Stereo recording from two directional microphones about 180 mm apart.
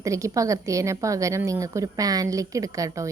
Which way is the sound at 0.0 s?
15° right (ahead or behind).